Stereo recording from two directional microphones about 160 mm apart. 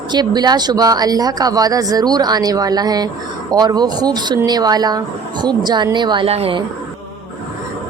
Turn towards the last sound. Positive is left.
turn(degrees=-35)  # may be behind; listen again after turning